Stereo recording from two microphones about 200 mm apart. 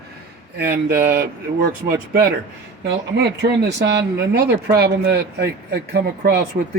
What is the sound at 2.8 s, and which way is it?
A man's voice, 55° right (ahead or behind).